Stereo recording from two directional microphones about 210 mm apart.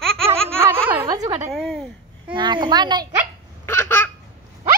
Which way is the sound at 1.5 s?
Centre (ahead or behind).